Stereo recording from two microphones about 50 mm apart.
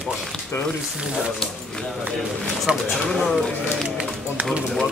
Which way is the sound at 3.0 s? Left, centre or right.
Centre.